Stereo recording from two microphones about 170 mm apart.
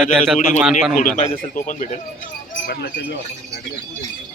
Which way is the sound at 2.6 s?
65° left (ahead or behind).